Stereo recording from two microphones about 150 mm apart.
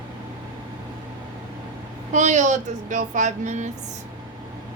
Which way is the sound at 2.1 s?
55° right (ahead or behind).